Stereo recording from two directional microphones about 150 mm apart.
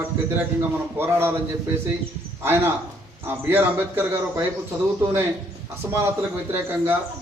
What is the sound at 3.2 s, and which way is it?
A man's voice, 15° right (ahead or behind).